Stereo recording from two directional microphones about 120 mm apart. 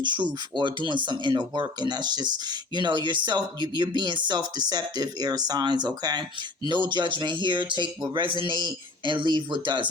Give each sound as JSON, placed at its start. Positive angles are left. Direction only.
{"t": 0.0, "sound": "speech", "side_deg": -40}